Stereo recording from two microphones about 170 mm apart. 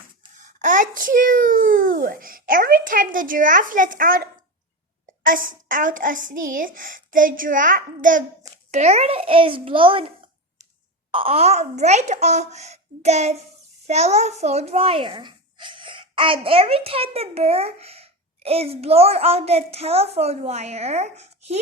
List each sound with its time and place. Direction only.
0.3 s a child's voice: 50° right (ahead or behind)
8.7 s a child's voice: 40° right (ahead or behind)
11.1 s a child's voice: 35° right (ahead or behind)